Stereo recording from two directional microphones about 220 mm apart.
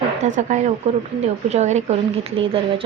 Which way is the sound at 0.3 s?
35° right (ahead or behind).